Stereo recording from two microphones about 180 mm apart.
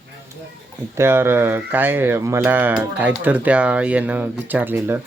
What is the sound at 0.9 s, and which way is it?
Speech, 15° right (ahead or behind).